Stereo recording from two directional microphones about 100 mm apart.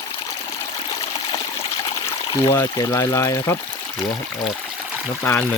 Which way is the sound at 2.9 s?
30° left (ahead or behind).